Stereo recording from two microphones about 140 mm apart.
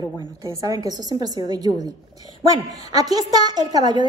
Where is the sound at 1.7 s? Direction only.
45° left (ahead or behind).